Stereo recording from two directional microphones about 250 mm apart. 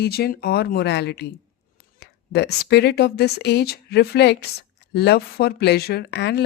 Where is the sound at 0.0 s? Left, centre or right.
Left.